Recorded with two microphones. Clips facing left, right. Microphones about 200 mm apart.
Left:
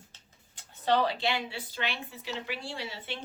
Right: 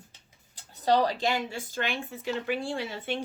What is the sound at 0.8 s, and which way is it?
Speech, 40° right (ahead or behind).